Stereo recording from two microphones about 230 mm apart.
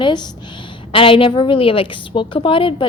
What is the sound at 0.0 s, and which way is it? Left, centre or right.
A woman's voice, centre.